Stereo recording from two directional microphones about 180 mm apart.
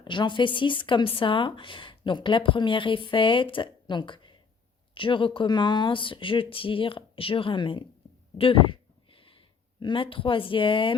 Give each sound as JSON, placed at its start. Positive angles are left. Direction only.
{"t": 0.0, "sound": "speech", "side_deg": 25}
{"t": 8.4, "sound": "a sound", "side_deg": 30}
{"t": 9.8, "sound": "speech", "side_deg": 30}